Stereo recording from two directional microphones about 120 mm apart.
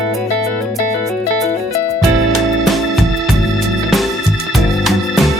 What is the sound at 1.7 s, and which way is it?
Music, 25° left (ahead or behind).